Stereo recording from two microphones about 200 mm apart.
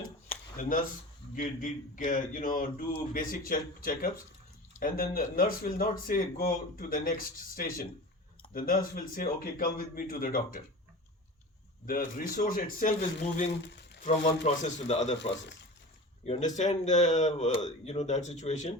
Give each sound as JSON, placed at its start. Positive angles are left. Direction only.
{"t": 0.6, "sound": "speech", "side_deg": 40}
{"t": 11.9, "sound": "speech", "side_deg": 45}
{"t": 13.5, "sound": "speech", "side_deg": 60}
{"t": 14.4, "sound": "speech", "side_deg": 35}
{"t": 16.2, "sound": "speech", "side_deg": 35}